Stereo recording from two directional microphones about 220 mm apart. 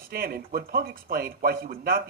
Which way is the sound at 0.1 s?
45° right (ahead or behind).